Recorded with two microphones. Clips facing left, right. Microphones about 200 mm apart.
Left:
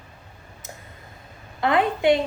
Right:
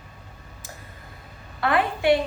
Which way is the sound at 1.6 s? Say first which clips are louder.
Left 2 dB; 20° left (ahead or behind).